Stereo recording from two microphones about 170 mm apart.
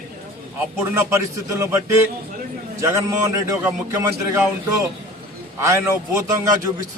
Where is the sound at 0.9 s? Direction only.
20° right (ahead or behind).